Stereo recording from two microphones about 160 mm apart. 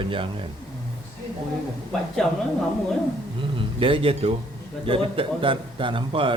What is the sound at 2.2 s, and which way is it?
Speech, centre (ahead or behind).